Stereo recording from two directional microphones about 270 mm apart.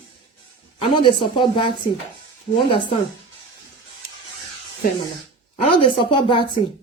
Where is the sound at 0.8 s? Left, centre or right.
Centre.